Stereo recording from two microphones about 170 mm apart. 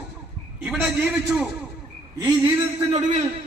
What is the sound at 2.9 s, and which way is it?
Speech, 40° right (ahead or behind).